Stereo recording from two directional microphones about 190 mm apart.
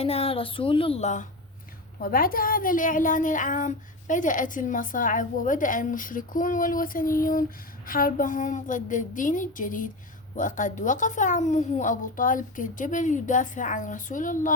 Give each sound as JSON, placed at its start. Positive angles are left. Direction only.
{"t": 0.0, "sound": "a woman's voice", "side_deg": 30}
{"t": 2.0, "sound": "a woman's voice", "side_deg": 50}